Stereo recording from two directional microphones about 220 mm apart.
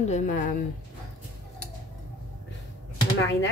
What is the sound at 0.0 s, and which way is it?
Speech, 35° left (ahead or behind).